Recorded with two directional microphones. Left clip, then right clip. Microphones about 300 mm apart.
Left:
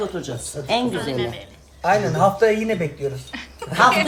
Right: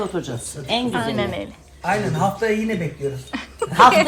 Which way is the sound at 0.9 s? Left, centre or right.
Centre.